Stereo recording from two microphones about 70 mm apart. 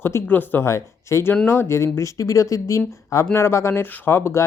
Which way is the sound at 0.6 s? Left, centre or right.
Left.